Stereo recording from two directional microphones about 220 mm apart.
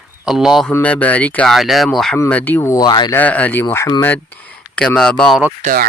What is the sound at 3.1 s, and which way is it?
Speech, 5° left (ahead or behind).